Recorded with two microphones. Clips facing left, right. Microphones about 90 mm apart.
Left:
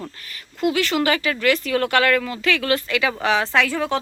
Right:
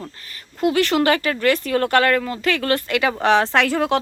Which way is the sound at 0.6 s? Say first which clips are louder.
Right 3 dB; 45° right (ahead or behind).